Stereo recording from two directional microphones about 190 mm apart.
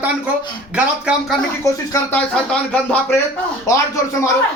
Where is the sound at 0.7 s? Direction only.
5° right (ahead or behind).